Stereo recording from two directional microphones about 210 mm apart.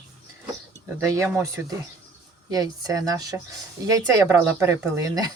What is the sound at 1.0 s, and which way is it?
Speech, 15° right (ahead or behind).